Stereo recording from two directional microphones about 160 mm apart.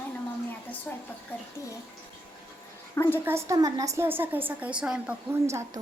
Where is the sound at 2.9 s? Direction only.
15° left (ahead or behind).